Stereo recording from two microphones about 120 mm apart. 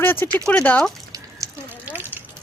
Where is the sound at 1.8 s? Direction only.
15° right (ahead or behind).